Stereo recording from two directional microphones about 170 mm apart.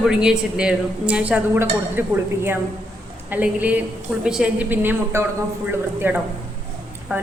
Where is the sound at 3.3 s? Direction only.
10° right (ahead or behind).